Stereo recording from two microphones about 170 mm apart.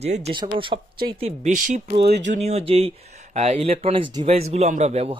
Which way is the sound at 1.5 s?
45° right (ahead or behind).